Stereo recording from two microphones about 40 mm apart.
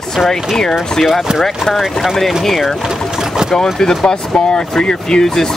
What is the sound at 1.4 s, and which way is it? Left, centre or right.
Speech, centre.